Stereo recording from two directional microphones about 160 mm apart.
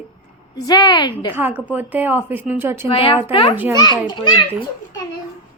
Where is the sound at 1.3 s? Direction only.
10° right (ahead or behind).